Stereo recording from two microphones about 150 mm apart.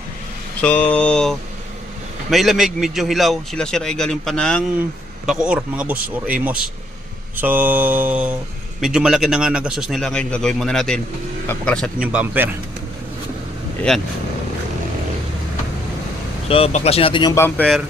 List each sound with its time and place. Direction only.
0.6 s a sound: 10° left (ahead or behind)
2.3 s a man's voice: centre (ahead or behind)
5.2 s mantra: 5° right (ahead or behind)
8.8 s a man's voice: 5° right (ahead or behind)
12.1 s mantra: 10° right (ahead or behind)
16.5 s speech: 40° left (ahead or behind)